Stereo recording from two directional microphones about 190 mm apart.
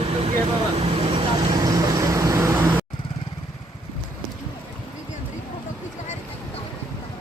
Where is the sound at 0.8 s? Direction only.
30° right (ahead or behind); by 2.8 s 15° right (ahead or behind).